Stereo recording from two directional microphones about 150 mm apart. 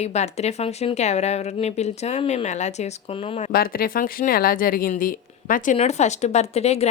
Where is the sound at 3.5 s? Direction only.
75° left (ahead or behind).